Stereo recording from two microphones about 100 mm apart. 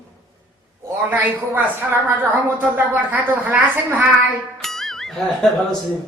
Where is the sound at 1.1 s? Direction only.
15° right (ahead or behind).